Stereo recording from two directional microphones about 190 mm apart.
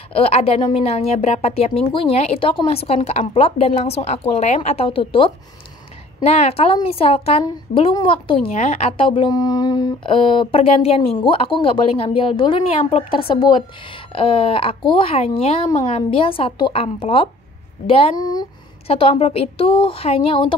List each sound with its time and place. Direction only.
0.1 s a woman's voice: 30° left (ahead or behind)